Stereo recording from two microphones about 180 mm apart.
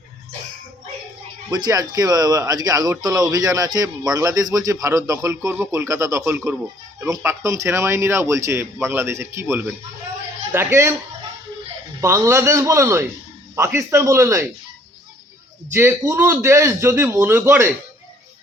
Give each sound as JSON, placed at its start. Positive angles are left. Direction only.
{"t": 1.5, "sound": "speech", "side_deg": -20}
{"t": 11.9, "sound": "speech", "side_deg": -15}
{"t": 15.7, "sound": "speech", "side_deg": -15}